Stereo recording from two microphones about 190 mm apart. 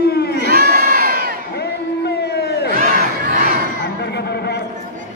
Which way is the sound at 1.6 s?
60° left (ahead or behind).